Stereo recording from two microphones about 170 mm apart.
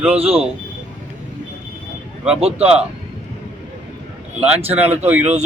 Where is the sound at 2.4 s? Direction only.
35° right (ahead or behind).